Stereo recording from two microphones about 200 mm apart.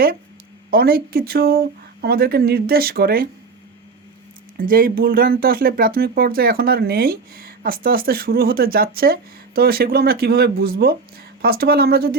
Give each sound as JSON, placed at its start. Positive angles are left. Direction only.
{"t": 0.7, "sound": "speech", "side_deg": -50}
{"t": 4.5, "sound": "speech", "side_deg": -45}